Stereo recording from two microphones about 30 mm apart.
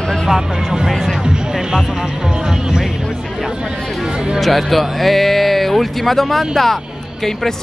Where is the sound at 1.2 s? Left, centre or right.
Right.